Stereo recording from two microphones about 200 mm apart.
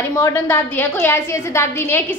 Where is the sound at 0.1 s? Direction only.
15° left (ahead or behind).